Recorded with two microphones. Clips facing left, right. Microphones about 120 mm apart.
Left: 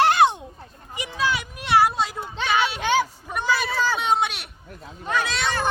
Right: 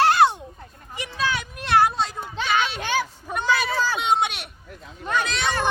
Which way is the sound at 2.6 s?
10° left (ahead or behind).